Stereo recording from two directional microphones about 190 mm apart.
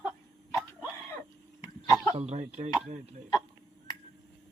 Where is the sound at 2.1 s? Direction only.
35° right (ahead or behind).